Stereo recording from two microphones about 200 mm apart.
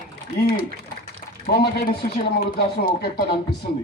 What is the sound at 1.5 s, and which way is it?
Speech, 50° left (ahead or behind).